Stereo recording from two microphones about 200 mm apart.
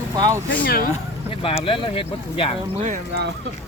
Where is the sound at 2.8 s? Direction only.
35° right (ahead or behind).